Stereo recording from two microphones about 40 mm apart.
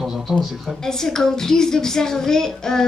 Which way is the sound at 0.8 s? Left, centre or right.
Centre.